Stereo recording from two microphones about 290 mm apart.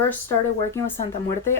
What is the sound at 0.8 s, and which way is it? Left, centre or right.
Speech, centre.